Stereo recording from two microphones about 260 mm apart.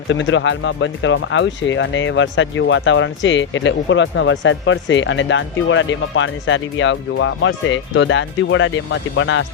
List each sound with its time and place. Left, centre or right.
0.1 s speech: left